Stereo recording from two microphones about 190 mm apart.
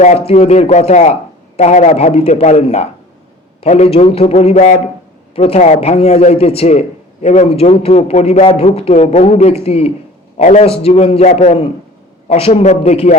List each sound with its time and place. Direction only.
0.0 s a man's voice: 35° left (ahead or behind)